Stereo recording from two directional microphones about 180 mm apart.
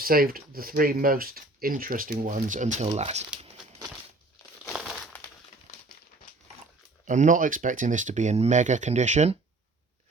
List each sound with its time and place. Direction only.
0.0 s speech: 55° right (ahead or behind)
4.7 s crumpling: centre (ahead or behind)
7.1 s speech: 45° right (ahead or behind)